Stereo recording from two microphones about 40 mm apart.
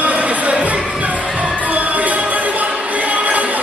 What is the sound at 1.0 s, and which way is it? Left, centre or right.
Music, right.